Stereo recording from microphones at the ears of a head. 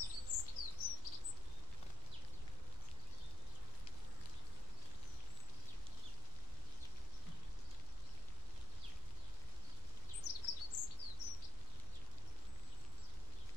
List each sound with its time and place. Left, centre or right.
0.0 s bird vocalization: left
10.2 s bird vocalization: left